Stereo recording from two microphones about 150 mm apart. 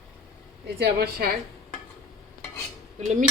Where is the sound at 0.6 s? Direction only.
90° right.